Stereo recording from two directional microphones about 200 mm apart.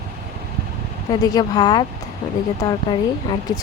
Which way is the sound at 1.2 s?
20° left (ahead or behind).